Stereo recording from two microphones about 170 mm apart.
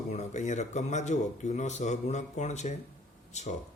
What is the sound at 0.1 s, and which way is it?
Speech, 45° left (ahead or behind).